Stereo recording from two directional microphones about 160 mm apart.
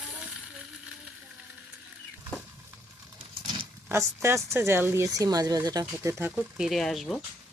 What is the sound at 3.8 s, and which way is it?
Speech, 15° right (ahead or behind).